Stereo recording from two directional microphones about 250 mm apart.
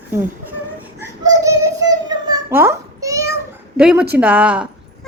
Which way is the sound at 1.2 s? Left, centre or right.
Centre.